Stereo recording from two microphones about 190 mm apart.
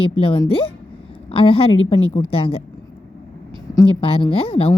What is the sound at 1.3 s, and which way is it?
Speech, 30° left (ahead or behind).